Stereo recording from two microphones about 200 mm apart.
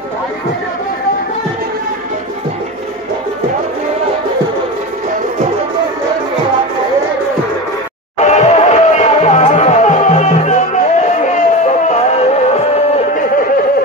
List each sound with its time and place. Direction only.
8.2 s music: 35° left (ahead or behind)